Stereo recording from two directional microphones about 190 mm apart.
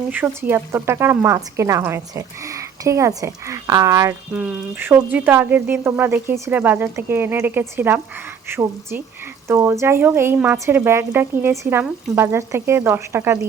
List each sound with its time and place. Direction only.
0.1 s speech: 10° right (ahead or behind)